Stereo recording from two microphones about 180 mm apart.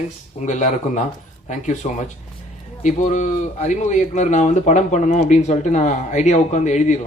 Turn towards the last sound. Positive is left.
turn(degrees=40)  # may be behind; listen again after turning